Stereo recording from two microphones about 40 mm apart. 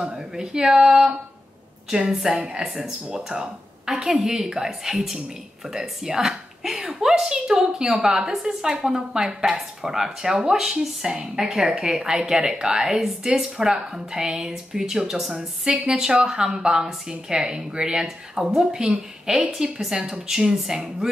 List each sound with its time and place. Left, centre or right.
0.1 s a woman's voice: centre
2.6 s a woman's voice: centre
6.8 s a sound: centre
7.2 s a woman's voice: centre
15.3 s a woman's voice: right
15.9 s a woman's voice: centre
18.6 s a woman's voice: centre